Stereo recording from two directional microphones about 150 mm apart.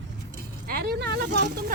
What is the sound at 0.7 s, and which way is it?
Speech, 85° right.